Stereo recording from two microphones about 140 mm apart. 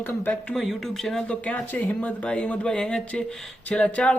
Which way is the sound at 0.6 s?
Centre (ahead or behind).